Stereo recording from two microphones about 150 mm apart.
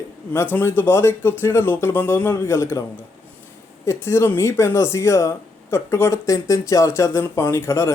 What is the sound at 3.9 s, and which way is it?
Speech, 15° left (ahead or behind).